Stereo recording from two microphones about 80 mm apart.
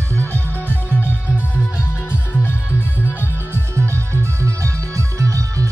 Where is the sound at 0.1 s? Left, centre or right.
Centre.